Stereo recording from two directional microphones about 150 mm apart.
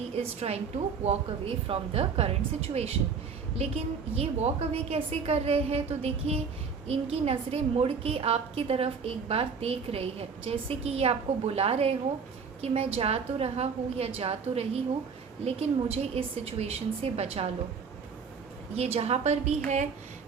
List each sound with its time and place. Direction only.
0.2 s a woman's voice: 45° right (ahead or behind)
18.8 s a woman's voice: 45° right (ahead or behind)